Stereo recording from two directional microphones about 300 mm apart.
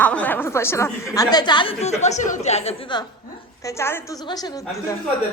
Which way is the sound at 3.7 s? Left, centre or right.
Centre.